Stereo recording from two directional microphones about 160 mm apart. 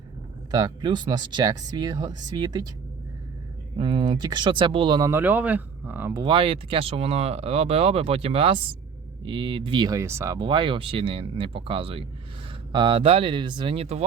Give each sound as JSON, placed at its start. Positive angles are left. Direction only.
{"t": 0.5, "sound": "speech", "side_deg": -25}
{"t": 3.8, "sound": "speech", "side_deg": -30}
{"t": 5.1, "sound": "speech", "side_deg": -10}
{"t": 6.1, "sound": "speech", "side_deg": -30}